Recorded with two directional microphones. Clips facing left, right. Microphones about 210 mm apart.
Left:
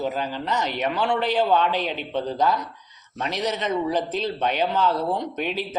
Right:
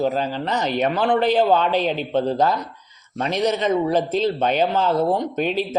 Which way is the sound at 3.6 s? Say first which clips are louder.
Right 5 dB; 40° right (ahead or behind).